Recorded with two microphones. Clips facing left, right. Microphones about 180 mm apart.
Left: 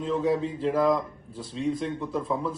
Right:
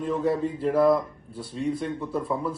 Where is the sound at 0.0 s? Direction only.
Centre (ahead or behind).